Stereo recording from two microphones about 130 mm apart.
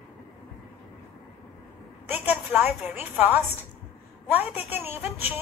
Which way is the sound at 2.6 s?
15° right (ahead or behind).